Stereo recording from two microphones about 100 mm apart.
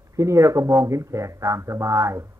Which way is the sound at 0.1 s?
30° right (ahead or behind).